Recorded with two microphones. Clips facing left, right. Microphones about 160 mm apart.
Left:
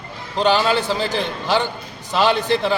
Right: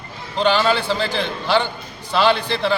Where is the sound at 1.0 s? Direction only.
45° left (ahead or behind).